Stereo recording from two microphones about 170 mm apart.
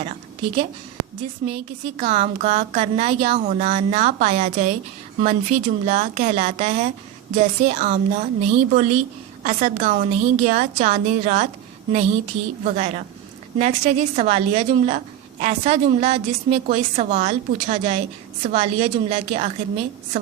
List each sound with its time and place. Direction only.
0.0 s a sound: 35° right (ahead or behind)
1.5 s a woman's voice: 35° right (ahead or behind)
12.6 s a woman's voice: 40° right (ahead or behind)